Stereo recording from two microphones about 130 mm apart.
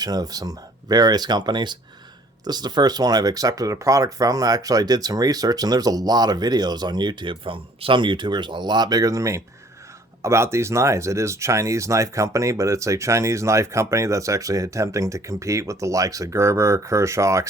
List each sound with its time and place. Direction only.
0.0 s speech: 30° right (ahead or behind)